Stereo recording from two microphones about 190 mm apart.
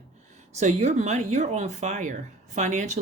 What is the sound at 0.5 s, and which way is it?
Speech, 35° right (ahead or behind).